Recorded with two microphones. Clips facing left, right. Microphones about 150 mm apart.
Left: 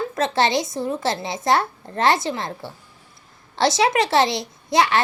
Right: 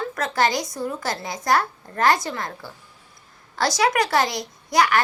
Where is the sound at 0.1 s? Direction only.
25° left (ahead or behind).